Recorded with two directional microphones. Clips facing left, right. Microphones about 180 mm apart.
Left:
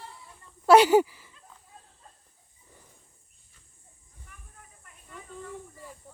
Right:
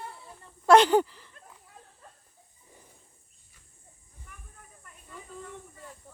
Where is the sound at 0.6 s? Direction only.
10° left (ahead or behind).